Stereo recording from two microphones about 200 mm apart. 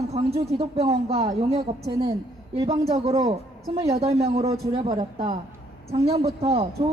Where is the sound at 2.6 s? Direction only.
20° right (ahead or behind).